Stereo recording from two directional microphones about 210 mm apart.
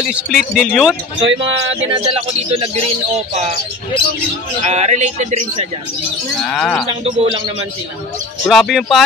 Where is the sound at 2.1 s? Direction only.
25° right (ahead or behind).